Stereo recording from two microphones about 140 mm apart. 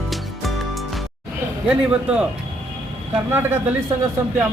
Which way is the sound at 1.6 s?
10° right (ahead or behind).